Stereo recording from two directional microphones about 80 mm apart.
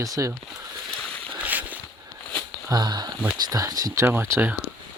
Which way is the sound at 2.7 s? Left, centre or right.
Right.